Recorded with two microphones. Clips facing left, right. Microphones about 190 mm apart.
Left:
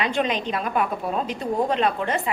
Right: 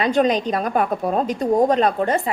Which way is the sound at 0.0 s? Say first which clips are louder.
Right 6 dB; 40° right (ahead or behind).